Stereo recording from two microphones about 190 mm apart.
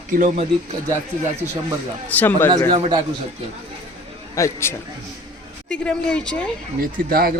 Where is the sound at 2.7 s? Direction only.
25° right (ahead or behind).